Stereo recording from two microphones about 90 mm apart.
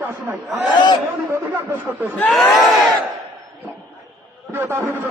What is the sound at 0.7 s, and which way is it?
Speech, 55° left (ahead or behind).